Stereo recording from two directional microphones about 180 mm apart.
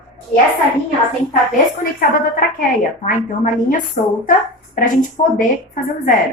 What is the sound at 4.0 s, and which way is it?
A woman's voice, 45° left (ahead or behind).